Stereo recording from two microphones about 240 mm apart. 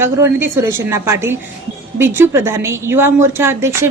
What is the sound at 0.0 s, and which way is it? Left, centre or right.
A woman's voice, centre.